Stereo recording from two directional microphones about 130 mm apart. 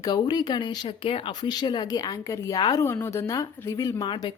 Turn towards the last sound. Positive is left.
turn(degrees=35)  # may be behind; listen again after turning